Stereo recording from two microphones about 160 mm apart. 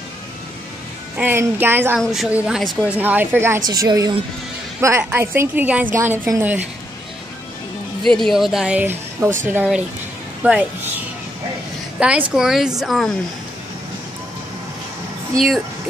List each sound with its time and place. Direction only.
1.1 s a woman's voice: 10° right (ahead or behind)
2.0 s a woman's voice: centre (ahead or behind)
8.0 s a woman's voice: centre (ahead or behind)
12.0 s speech: 5° right (ahead or behind)
15.3 s speech: centre (ahead or behind)